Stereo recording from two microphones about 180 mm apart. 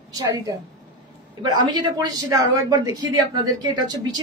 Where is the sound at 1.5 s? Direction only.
25° right (ahead or behind).